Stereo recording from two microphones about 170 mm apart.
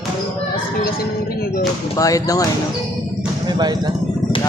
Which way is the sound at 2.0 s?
20° left (ahead or behind).